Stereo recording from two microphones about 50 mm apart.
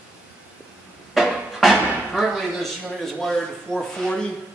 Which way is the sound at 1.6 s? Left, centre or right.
Centre.